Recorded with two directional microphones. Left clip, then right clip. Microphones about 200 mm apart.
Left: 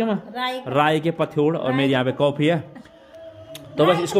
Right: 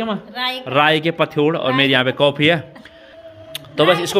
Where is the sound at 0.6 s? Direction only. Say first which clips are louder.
Right 5 dB; 5° left (ahead or behind).